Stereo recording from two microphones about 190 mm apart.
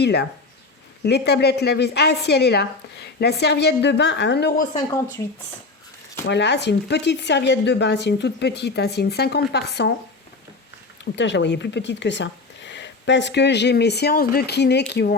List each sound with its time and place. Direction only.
0.0 s speech: 60° left (ahead or behind)
4.8 s speech: 15° left (ahead or behind)
6.2 s speech: 65° left (ahead or behind)
11.1 s speech: 70° left (ahead or behind)